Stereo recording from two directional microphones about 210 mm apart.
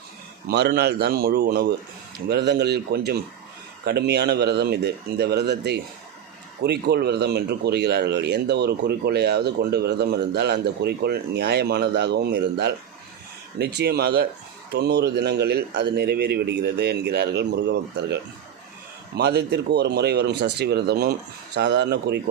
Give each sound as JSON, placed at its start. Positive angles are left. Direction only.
{"t": 0.4, "sound": "speech", "side_deg": -50}